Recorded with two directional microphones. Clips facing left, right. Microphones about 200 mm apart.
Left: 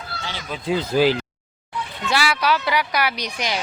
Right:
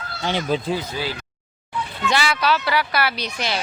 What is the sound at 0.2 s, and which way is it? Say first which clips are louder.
Speech: right 12 dB; 60° right (ahead or behind).